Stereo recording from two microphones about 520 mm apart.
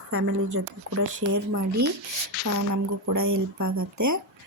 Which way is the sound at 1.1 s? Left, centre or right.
Right.